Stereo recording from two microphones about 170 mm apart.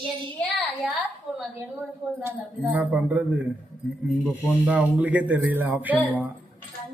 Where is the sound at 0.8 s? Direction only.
5° right (ahead or behind).